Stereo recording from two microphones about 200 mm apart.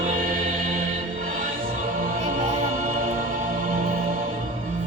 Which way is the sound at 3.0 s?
45° right (ahead or behind).